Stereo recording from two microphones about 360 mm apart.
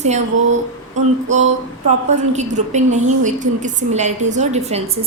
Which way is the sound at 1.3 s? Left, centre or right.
Centre.